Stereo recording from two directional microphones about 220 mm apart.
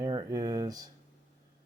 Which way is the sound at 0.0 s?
20° right (ahead or behind).